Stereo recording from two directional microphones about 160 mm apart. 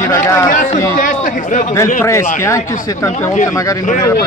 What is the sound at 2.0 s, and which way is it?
Speech, 15° left (ahead or behind).